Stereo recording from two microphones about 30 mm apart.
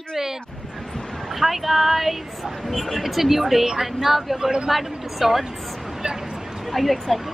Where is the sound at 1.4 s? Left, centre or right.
Centre.